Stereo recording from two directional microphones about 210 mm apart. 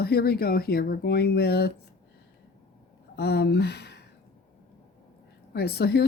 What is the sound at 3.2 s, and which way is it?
Speech, 50° left (ahead or behind).